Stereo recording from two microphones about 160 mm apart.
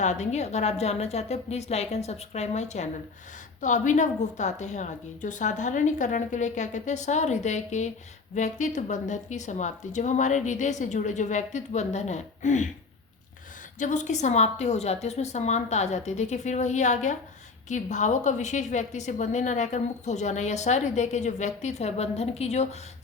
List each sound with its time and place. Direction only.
0.0 s a woman's voice: 45° left (ahead or behind)
13.7 s a woman's voice: 50° left (ahead or behind)